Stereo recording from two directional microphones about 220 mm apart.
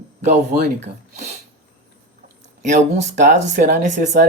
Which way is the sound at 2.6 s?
35° right (ahead or behind).